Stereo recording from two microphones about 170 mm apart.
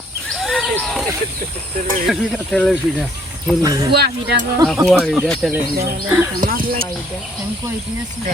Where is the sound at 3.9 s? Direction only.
70° right (ahead or behind).